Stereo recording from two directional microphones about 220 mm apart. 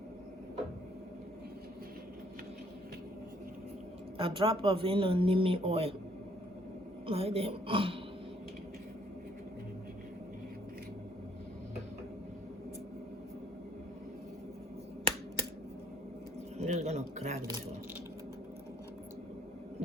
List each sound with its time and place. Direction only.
4.2 s speech: 25° right (ahead or behind)
7.1 s speech: 25° right (ahead or behind)
16.6 s a man's voice: 30° right (ahead or behind)